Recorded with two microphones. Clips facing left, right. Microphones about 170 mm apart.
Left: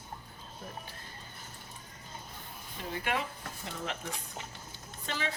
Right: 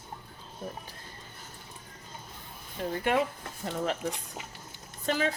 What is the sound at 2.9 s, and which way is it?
Speech, 50° right (ahead or behind).